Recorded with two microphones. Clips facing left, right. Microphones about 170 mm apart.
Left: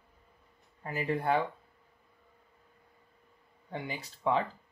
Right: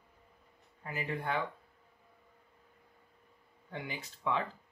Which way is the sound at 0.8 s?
35° left (ahead or behind).